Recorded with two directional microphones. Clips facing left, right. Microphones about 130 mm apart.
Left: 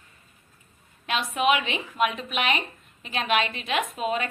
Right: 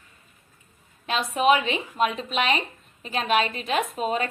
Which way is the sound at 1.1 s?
35° right (ahead or behind).